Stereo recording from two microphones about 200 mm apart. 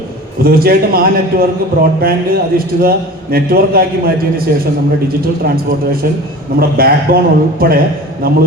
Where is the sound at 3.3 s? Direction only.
50° right (ahead or behind).